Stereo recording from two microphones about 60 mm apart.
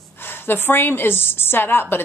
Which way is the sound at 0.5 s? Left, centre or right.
Left.